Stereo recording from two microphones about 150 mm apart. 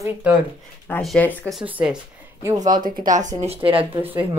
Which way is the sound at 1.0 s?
Centre (ahead or behind).